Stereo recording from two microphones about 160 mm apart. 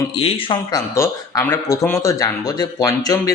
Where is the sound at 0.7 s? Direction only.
20° left (ahead or behind).